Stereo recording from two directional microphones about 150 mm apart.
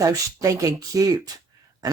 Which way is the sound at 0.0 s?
20° right (ahead or behind).